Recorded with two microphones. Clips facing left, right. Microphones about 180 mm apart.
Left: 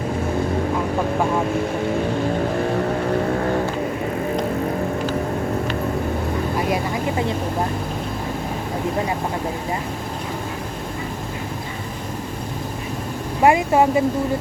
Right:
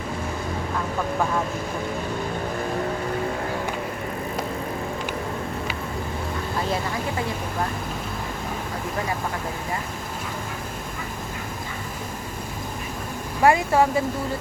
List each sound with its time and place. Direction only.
13.4 s speech: 20° left (ahead or behind)